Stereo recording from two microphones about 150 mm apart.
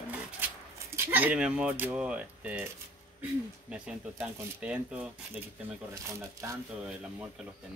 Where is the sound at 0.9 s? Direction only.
10° right (ahead or behind).